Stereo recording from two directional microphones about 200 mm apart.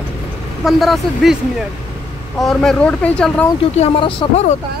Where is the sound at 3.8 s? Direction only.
25° left (ahead or behind).